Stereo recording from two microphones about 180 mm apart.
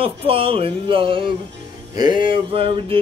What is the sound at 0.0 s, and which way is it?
Speech, 30° right (ahead or behind).